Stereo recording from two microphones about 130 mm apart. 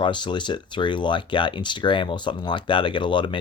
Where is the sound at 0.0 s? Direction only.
40° left (ahead or behind).